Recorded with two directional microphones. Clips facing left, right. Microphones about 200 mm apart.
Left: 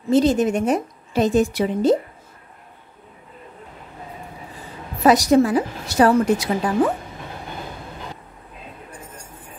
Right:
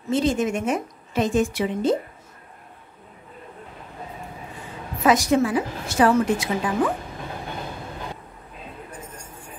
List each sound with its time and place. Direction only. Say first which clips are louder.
0.1 s a woman's voice: left 5 dB; 40° left (ahead or behind)
5.0 s a woman's voice: left 4 dB; 35° left (ahead or behind)